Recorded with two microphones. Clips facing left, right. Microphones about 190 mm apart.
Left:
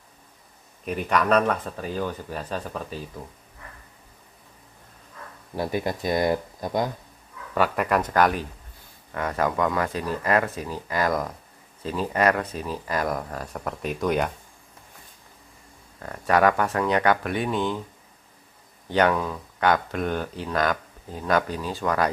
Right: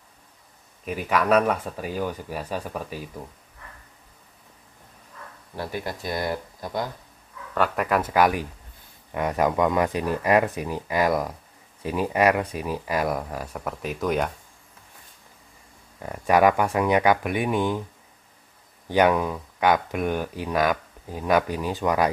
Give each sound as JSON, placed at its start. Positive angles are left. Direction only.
{"t": 0.8, "sound": "speech", "side_deg": -5}
{"t": 5.6, "sound": "speech", "side_deg": 20}
{"t": 7.5, "sound": "speech", "side_deg": 0}
{"t": 16.0, "sound": "speech", "side_deg": -15}
{"t": 18.9, "sound": "speech", "side_deg": -15}